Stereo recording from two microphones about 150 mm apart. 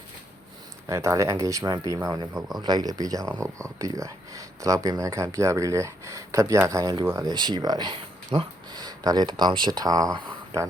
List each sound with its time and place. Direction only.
0.9 s speech: 20° right (ahead or behind)